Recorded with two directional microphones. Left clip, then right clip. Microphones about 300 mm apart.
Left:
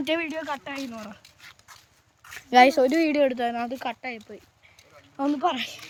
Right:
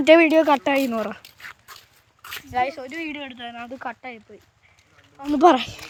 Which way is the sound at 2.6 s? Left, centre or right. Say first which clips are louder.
Left 8 dB; left.